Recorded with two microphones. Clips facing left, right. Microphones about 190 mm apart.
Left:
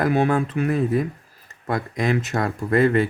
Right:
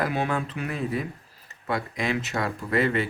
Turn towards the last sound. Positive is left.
turn(degrees=45)  # may be behind; listen again after turning